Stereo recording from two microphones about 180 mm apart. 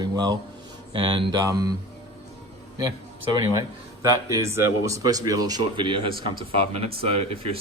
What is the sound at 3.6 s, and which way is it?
Speech, 20° right (ahead or behind).